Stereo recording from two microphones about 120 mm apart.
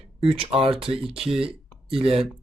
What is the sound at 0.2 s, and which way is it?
Speech, 50° right (ahead or behind).